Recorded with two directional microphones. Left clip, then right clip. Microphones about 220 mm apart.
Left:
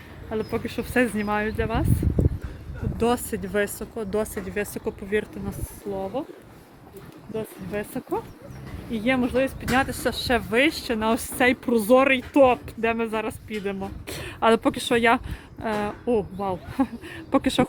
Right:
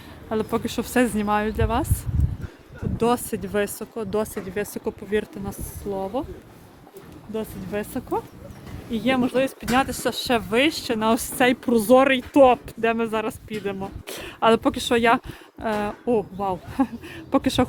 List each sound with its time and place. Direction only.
0.3 s speech: 15° right (ahead or behind)
3.0 s speech: 15° right (ahead or behind)
7.3 s speech: 15° right (ahead or behind)